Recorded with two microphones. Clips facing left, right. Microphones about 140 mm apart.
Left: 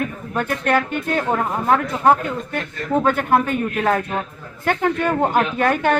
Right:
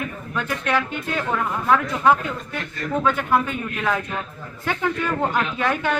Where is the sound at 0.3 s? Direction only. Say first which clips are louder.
Left 4 dB; 50° left (ahead or behind).